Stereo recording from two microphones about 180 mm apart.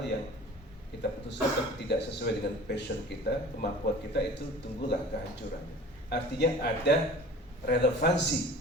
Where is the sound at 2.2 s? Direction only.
70° left (ahead or behind).